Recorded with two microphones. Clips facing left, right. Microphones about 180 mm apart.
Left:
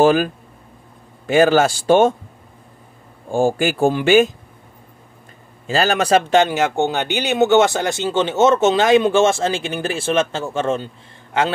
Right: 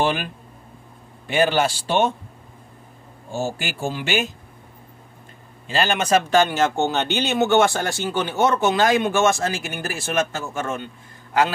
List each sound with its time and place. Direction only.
0.0 s a man's voice: 40° left (ahead or behind)
1.3 s speech: 45° left (ahead or behind)
3.3 s speech: 50° left (ahead or behind)
5.7 s a man's voice: 40° left (ahead or behind)
6.3 s speech: 20° left (ahead or behind)